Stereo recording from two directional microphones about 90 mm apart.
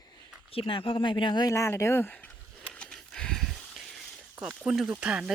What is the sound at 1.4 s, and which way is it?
Speech, 35° left (ahead or behind).